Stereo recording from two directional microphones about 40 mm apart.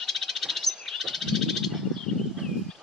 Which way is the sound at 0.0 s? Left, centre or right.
Centre.